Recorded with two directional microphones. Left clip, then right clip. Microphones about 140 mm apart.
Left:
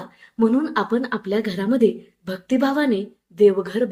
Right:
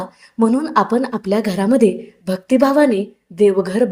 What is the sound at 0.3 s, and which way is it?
A woman's voice, 35° right (ahead or behind).